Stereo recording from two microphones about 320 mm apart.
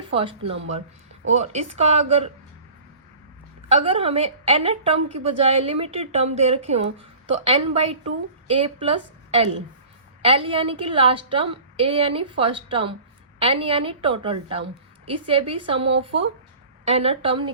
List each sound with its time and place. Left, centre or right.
0.1 s a woman's voice: centre
3.8 s a woman's voice: centre